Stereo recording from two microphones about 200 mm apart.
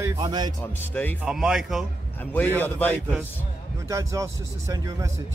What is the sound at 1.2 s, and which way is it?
Speech, centre (ahead or behind).